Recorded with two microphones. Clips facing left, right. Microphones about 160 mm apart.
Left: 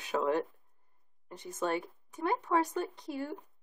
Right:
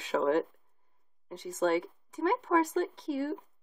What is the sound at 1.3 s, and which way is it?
Speech, 90° right.